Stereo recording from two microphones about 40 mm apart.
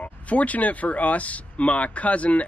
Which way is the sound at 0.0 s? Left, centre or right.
Left.